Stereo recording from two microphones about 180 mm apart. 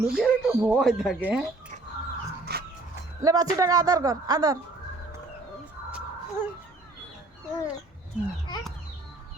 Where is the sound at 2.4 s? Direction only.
60° right (ahead or behind).